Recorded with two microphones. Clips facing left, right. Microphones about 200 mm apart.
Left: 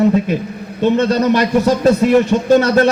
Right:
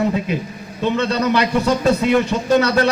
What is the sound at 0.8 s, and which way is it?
A man's voice, 40° left (ahead or behind).